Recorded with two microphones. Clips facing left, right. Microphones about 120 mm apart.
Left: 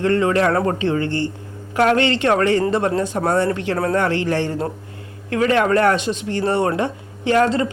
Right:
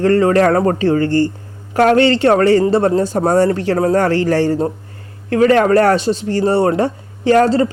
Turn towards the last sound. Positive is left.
turn(degrees=-35)  # may be behind; listen again after turning